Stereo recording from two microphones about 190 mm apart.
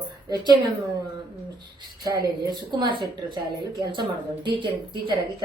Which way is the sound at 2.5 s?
20° right (ahead or behind).